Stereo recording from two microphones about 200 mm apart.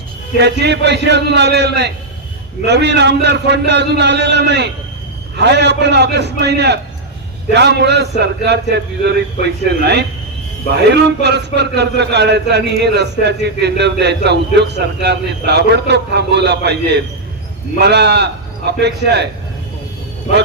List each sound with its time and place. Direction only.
0.3 s a man's voice: 55° right (ahead or behind)